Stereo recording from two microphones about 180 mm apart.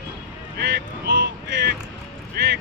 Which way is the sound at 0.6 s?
75° right (ahead or behind).